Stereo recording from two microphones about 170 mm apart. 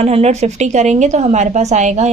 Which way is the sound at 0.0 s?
40° right (ahead or behind).